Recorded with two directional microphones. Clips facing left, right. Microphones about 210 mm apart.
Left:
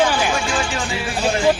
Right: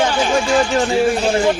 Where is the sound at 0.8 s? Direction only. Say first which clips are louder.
Right 11 dB; 45° right (ahead or behind).